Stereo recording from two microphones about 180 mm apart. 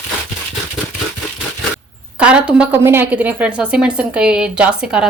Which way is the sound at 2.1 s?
5° right (ahead or behind).